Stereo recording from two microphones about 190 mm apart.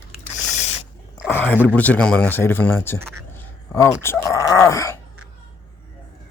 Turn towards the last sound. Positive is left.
turn(degrees=15)  # may be behind; listen again after turning